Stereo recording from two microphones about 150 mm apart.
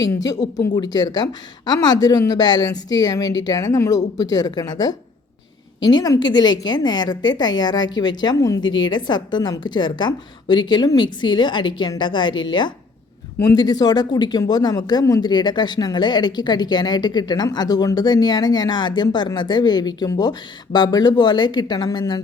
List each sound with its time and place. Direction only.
0.0 s a woman's voice: 25° left (ahead or behind)